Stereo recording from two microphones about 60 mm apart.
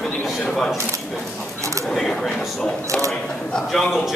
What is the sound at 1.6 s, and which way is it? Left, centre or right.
Single-lens reflex camera, right.